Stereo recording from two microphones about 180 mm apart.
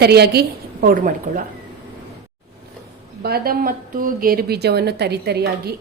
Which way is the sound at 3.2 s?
60° right (ahead or behind).